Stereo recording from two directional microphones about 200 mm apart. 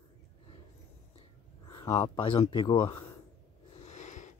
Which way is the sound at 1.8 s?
25° left (ahead or behind).